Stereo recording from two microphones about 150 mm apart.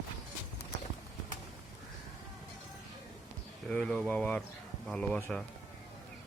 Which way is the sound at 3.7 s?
5° left (ahead or behind).